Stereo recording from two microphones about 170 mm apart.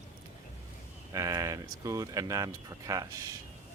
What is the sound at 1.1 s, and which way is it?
Speech, 20° right (ahead or behind).